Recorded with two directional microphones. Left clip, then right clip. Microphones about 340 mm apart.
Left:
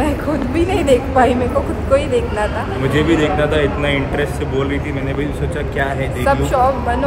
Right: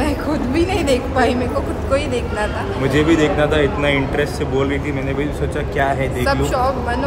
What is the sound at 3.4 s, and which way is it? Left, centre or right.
Speech, centre.